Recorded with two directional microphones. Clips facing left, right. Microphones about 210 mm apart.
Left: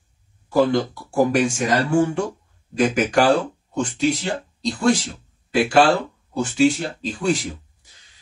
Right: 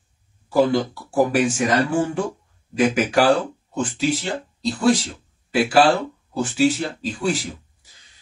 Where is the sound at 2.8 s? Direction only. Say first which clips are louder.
Even; 5° right (ahead or behind).